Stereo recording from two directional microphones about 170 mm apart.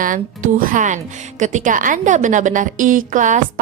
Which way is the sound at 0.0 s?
50° right (ahead or behind).